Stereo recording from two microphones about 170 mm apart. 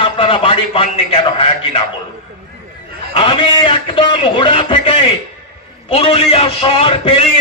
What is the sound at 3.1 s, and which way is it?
A man's voice, 30° left (ahead or behind).